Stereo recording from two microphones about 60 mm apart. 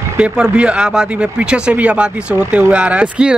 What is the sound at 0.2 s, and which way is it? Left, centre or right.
Speech, centre.